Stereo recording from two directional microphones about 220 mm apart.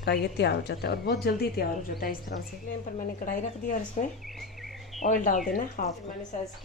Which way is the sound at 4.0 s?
35° left (ahead or behind).